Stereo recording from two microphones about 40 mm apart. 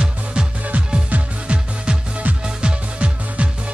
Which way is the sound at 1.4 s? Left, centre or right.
Right.